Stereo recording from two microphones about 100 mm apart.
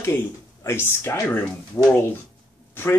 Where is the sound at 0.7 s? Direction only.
25° left (ahead or behind).